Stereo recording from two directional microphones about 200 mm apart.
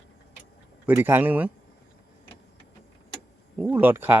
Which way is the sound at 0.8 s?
10° right (ahead or behind).